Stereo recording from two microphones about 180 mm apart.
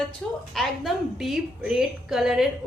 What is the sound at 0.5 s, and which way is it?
A woman's voice, centre (ahead or behind).